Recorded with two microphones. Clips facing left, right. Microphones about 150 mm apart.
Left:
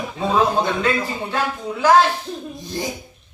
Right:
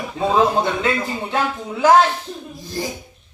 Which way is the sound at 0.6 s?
20° right (ahead or behind).